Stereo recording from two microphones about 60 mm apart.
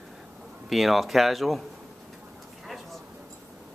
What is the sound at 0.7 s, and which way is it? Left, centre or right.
Speech, centre.